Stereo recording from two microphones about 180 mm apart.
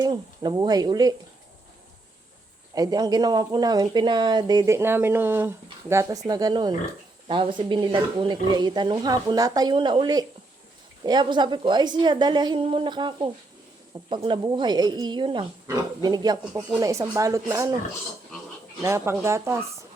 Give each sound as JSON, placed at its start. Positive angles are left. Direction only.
{"t": 0.0, "sound": "speech", "side_deg": -20}
{"t": 2.7, "sound": "speech", "side_deg": -20}
{"t": 18.8, "sound": "speech", "side_deg": -15}